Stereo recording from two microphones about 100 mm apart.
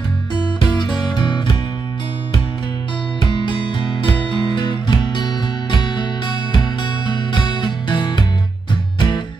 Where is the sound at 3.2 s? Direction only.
50° left (ahead or behind).